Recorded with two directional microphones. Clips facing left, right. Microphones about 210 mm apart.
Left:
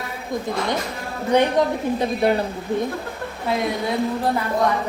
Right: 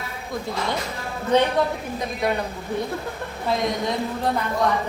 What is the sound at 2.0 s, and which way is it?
Speech, 30° left (ahead or behind).